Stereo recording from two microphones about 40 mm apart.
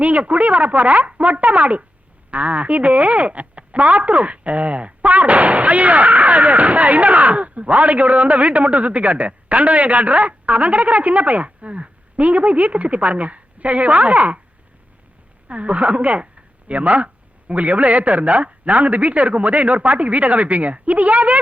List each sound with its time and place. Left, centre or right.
0.0 s speech: right
15.4 s speech: right